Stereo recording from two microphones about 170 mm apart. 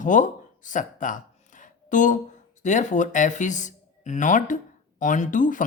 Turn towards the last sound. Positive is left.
turn(degrees=50)  # may be behind; listen again after turning